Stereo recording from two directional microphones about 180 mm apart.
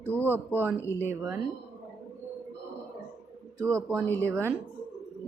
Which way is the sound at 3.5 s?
15° right (ahead or behind).